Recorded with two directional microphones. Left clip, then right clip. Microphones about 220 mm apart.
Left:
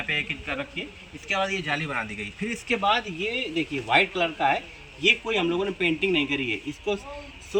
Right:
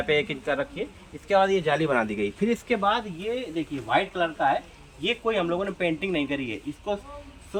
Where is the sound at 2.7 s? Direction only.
15° right (ahead or behind).